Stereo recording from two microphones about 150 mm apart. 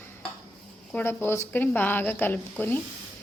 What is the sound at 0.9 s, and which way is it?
A woman's voice, 15° left (ahead or behind).